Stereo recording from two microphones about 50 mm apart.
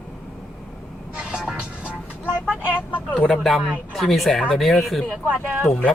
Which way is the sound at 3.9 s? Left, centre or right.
Centre.